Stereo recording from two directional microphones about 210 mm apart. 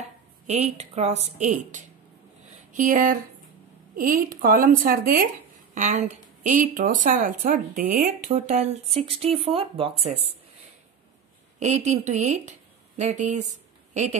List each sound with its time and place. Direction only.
0.0 s speech: 30° right (ahead or behind)
11.6 s speech: 35° right (ahead or behind)